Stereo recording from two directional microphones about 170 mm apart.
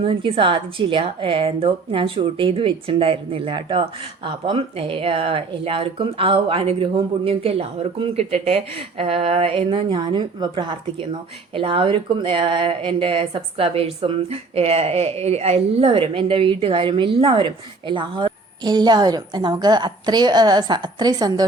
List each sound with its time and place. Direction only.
0.0 s a woman's voice: 30° right (ahead or behind)